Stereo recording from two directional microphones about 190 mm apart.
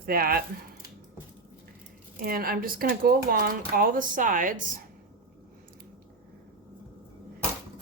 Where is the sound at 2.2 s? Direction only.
50° right (ahead or behind).